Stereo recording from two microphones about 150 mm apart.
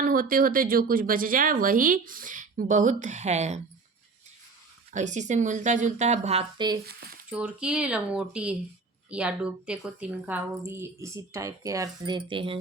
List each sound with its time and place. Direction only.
0.0 s speech: 70° right (ahead or behind); by 3.6 s 50° right (ahead or behind)
4.9 s a woman's voice: 55° right (ahead or behind)
6.8 s speech: 90° right
7.3 s a woman's voice: 5° right (ahead or behind); by 12.5 s 35° right (ahead or behind)